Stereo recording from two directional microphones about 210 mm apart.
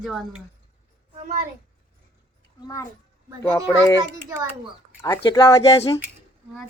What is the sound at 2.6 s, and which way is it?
Speech, 15° left (ahead or behind).